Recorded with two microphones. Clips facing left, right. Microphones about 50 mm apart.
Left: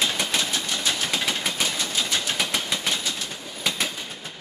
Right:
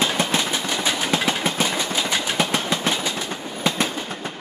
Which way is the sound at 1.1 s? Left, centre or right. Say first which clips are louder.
Right 5 dB; right.